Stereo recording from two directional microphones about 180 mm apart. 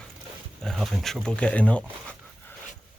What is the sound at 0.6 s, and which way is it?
Speech, centre (ahead or behind).